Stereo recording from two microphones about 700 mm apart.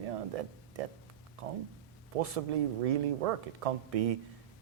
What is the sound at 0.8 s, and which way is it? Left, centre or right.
Speech, right.